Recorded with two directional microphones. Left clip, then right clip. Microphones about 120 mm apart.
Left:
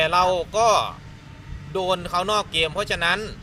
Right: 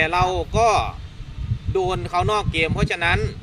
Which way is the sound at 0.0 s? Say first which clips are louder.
Left 1 dB; 35° right (ahead or behind).